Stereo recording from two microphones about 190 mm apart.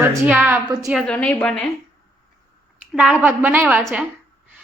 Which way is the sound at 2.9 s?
5° right (ahead or behind).